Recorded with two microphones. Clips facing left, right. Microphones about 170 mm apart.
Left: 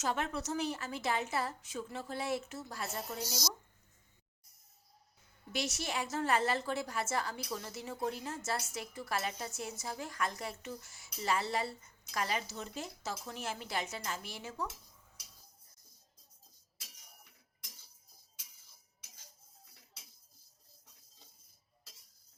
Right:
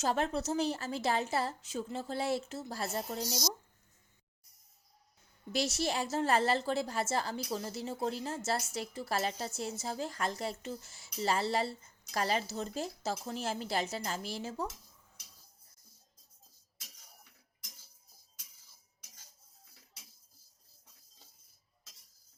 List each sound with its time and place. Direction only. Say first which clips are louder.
0.0 s a woman's voice: right 4 dB; 30° right (ahead or behind)
5.5 s a woman's voice: right 5 dB; 30° right (ahead or behind)